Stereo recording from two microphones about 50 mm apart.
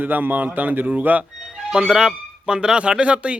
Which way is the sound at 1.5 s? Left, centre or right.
Centre.